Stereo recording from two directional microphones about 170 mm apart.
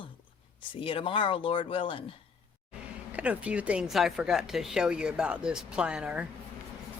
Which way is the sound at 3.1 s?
10° right (ahead or behind).